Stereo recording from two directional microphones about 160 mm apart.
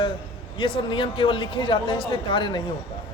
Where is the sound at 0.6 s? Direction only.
30° left (ahead or behind).